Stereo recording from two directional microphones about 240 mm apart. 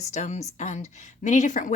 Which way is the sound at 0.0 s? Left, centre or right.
Left.